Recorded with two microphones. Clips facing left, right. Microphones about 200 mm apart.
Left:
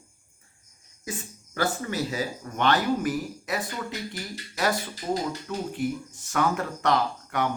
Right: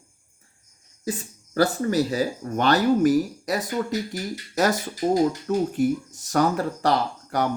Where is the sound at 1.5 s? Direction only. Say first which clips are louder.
Right 7 dB; 40° right (ahead or behind).